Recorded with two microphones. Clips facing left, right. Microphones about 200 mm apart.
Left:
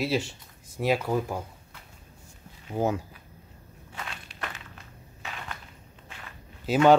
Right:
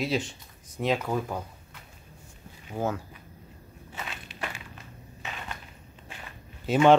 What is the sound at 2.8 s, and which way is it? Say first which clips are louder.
Speech: left 3 dB; 15° left (ahead or behind).